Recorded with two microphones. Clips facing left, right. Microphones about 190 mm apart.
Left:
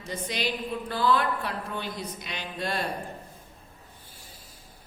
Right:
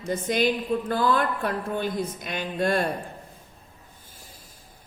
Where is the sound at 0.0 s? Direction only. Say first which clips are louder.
Right 8 dB; 50° right (ahead or behind).